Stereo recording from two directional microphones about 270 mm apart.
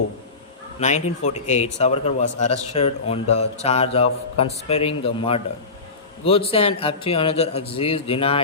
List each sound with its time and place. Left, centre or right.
0.8 s speech: left